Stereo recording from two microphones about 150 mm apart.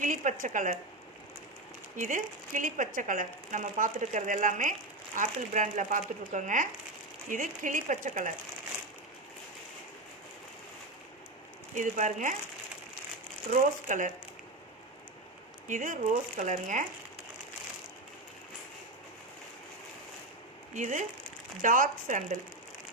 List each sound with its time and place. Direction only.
0.0 s speech: 55° right (ahead or behind)
2.0 s speech: 60° right (ahead or behind)
11.7 s speech: 55° right (ahead or behind)
13.5 s speech: 60° right (ahead or behind)
15.6 s speech: 60° right (ahead or behind)
20.7 s speech: 55° right (ahead or behind)